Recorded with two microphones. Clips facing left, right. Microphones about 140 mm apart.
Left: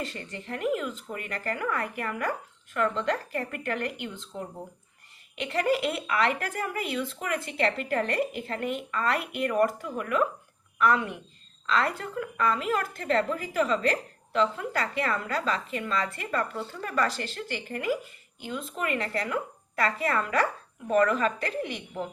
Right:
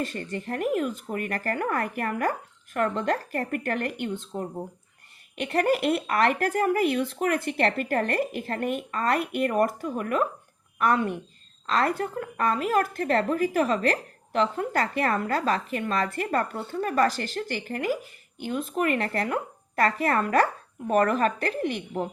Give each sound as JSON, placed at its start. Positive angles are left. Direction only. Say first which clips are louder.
{"t": 0.2, "sound": "a woman's voice", "louder": "right 4 dB", "side_deg": -50}
{"t": 18.3, "sound": "speech", "louder": "right 6 dB", "side_deg": -55}